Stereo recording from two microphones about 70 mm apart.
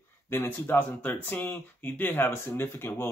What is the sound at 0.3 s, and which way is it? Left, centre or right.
Speech, left.